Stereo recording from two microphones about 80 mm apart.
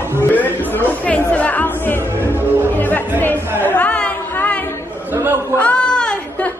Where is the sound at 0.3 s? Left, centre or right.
Left.